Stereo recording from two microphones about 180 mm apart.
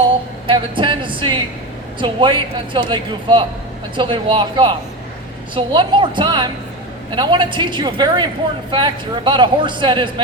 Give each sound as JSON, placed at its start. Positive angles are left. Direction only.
{"t": 0.4, "sound": "speech", "side_deg": -25}